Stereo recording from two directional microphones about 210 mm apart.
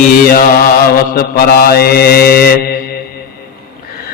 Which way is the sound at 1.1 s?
45° left (ahead or behind).